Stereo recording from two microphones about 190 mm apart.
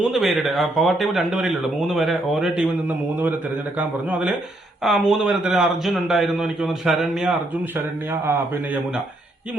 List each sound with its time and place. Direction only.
0.1 s a man's voice: centre (ahead or behind)